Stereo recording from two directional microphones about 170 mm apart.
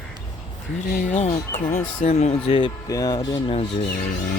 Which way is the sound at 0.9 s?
50° left (ahead or behind).